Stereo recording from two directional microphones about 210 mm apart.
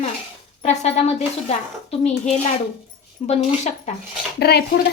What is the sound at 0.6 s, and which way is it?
Speech, 30° left (ahead or behind).